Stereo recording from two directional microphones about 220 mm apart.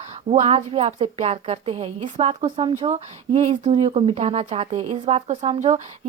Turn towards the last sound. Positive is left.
turn(degrees=-30)  # may be behind; listen again after turning